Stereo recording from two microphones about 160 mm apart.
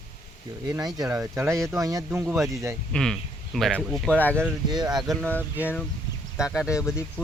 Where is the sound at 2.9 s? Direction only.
5° left (ahead or behind).